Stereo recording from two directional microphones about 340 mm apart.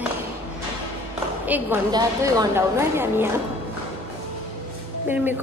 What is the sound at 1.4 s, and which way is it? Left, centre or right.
A woman's voice, centre.